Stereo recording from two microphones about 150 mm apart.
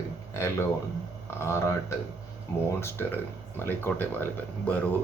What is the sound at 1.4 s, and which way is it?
Speech, 20° left (ahead or behind).